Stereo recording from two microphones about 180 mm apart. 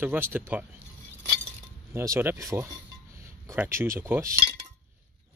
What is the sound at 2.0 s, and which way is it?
Speech, 15° right (ahead or behind).